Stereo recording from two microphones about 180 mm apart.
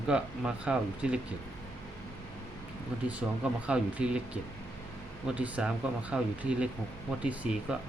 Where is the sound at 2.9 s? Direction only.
5° right (ahead or behind).